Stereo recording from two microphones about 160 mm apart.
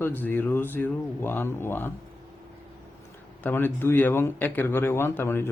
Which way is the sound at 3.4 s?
15° left (ahead or behind).